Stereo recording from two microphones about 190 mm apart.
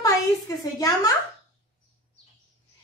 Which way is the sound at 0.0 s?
20° left (ahead or behind).